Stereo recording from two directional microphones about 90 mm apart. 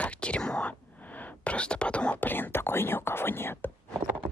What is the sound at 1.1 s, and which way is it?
Speech, 15° left (ahead or behind).